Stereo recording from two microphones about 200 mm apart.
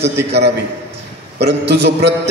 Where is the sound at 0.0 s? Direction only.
55° right (ahead or behind).